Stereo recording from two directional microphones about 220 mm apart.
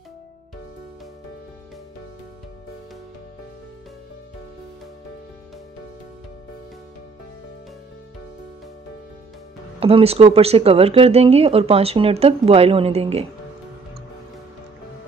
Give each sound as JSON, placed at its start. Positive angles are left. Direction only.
{"t": 9.8, "sound": "speech", "side_deg": -25}